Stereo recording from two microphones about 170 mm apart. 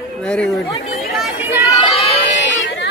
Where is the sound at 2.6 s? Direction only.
90° left.